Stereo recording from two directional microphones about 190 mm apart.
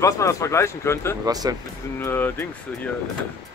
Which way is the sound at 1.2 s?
20° right (ahead or behind).